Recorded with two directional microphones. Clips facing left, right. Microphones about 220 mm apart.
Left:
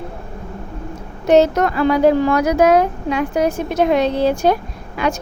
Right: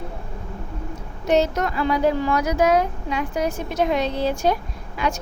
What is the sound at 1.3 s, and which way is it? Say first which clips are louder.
A woman's voice: left 7 dB; 65° left (ahead or behind).